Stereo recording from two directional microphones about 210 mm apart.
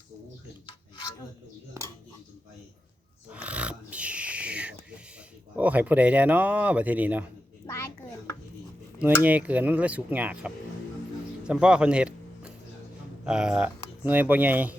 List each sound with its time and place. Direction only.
3.2 s a sound: 5° right (ahead or behind)
5.5 s speech: 5° right (ahead or behind)
7.6 s a child's voice: 15° left (ahead or behind)
9.2 s speech: 5° right (ahead or behind)